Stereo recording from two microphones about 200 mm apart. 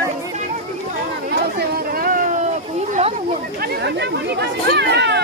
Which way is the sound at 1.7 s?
45° right (ahead or behind).